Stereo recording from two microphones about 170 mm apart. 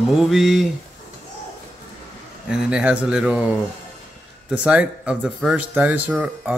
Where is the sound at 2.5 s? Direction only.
5° right (ahead or behind).